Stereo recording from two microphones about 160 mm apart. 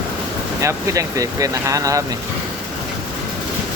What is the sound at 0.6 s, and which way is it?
Speech, 20° right (ahead or behind).